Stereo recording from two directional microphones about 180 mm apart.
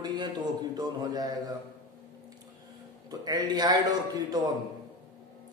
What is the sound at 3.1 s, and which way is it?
A man's voice, 20° right (ahead or behind).